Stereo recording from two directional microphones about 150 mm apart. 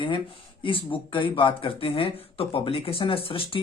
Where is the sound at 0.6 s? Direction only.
35° left (ahead or behind).